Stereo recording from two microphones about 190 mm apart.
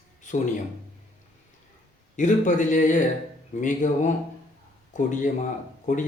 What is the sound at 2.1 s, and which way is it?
A man's voice, 40° left (ahead or behind).